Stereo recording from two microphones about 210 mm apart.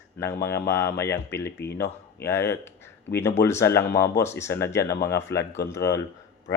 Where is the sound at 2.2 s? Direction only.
10° left (ahead or behind).